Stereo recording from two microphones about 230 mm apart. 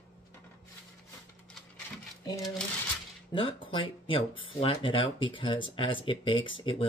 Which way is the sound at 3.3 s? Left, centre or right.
Left.